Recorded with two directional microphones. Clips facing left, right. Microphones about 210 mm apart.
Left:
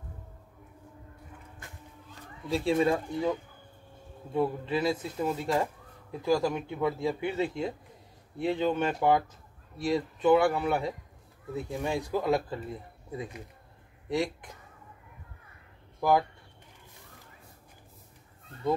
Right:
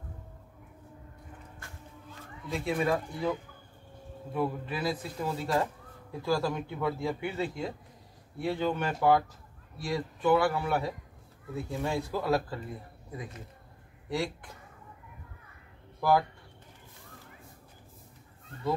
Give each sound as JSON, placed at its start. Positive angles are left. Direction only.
{"t": 2.5, "sound": "a man's voice", "side_deg": 30}
{"t": 14.0, "sound": "speech", "side_deg": 20}
{"t": 16.0, "sound": "speech", "side_deg": 20}